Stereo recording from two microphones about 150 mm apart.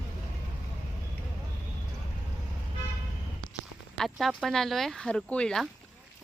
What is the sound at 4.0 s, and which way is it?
Speech, centre (ahead or behind).